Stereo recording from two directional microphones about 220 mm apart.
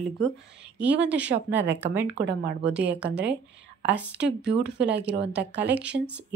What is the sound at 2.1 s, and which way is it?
Speech, 55° right (ahead or behind).